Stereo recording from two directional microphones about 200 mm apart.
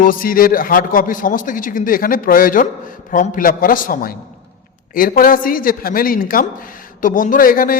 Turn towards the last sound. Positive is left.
turn(degrees=45)  # may be behind; listen again after turning